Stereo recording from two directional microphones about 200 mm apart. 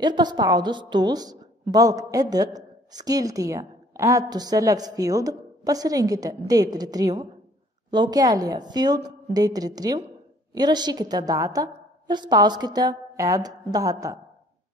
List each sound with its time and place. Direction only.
0.0 s a woman's voice: 20° right (ahead or behind)